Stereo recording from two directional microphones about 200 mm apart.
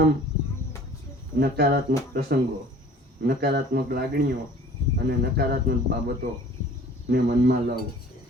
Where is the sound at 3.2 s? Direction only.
50° right (ahead or behind).